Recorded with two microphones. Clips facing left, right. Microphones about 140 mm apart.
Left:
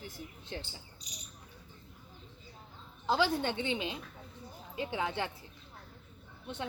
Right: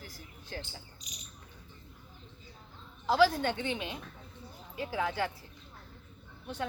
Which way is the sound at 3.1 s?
25° left (ahead or behind).